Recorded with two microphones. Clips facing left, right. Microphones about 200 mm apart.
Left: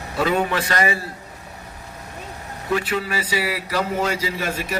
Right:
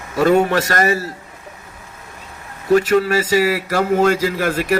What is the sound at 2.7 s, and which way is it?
A man's voice, 45° right (ahead or behind).